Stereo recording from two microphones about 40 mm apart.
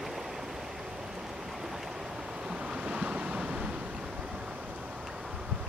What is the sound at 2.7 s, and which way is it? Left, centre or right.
Waves, right.